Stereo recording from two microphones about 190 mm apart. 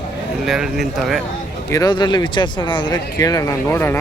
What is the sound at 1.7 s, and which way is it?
Speech, 20° left (ahead or behind).